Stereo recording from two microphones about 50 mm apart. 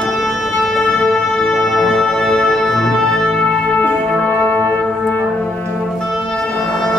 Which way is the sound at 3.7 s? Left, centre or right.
Left.